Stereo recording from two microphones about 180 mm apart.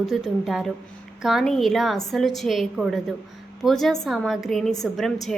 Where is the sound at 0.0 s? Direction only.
Centre (ahead or behind).